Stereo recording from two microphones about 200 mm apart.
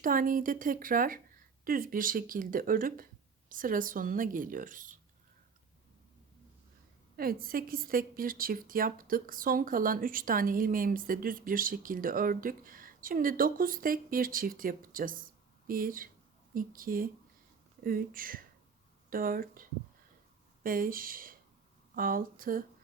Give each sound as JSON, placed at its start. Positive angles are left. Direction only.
{"t": 0.0, "sound": "a woman's voice", "side_deg": -45}
{"t": 7.2, "sound": "a woman's voice", "side_deg": -45}
{"t": 20.7, "sound": "a woman's voice", "side_deg": -45}